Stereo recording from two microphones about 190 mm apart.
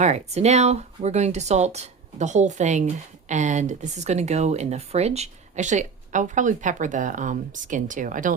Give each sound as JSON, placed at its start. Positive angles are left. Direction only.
{"t": 0.0, "sound": "speech", "side_deg": -35}